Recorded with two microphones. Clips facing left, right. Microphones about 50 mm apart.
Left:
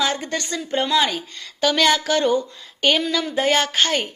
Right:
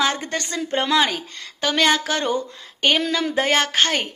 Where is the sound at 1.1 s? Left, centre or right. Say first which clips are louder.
Even; right.